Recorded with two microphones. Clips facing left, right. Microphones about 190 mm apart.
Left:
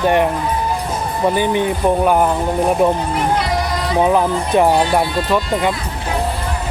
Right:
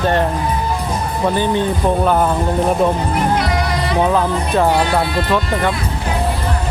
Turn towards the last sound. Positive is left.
turn(degrees=15)  # may be behind; listen again after turning